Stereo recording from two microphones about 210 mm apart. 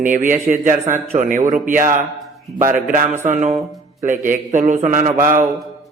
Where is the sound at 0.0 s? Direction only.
40° right (ahead or behind).